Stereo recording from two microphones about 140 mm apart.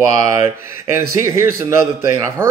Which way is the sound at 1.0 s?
20° right (ahead or behind).